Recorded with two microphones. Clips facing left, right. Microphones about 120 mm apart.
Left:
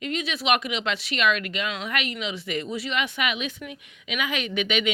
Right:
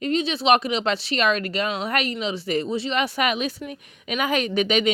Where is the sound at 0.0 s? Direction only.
30° right (ahead or behind).